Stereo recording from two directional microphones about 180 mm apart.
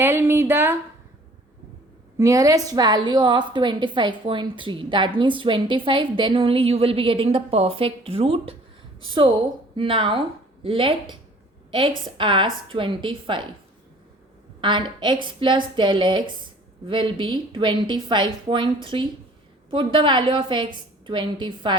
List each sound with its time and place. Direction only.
0.0 s speech: 15° right (ahead or behind)
2.1 s a woman's voice: 20° right (ahead or behind)
14.6 s a woman's voice: 25° right (ahead or behind)